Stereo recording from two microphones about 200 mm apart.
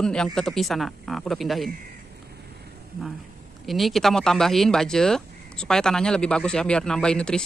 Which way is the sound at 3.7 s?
Centre (ahead or behind).